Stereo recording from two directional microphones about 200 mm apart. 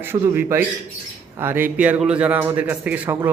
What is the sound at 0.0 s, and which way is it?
A man's voice, 10° right (ahead or behind).